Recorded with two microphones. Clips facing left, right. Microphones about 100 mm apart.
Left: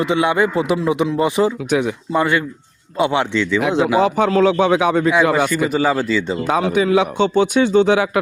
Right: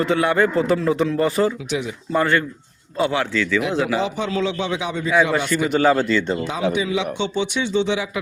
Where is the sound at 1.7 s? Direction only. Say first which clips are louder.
Left 7 dB; 60° left (ahead or behind).